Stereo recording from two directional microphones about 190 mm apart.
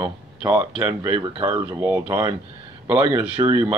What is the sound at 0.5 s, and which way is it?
Speech, 10° right (ahead or behind).